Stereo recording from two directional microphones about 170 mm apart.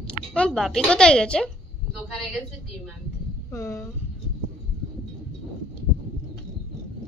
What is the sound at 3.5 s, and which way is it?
Speech, 15° left (ahead or behind).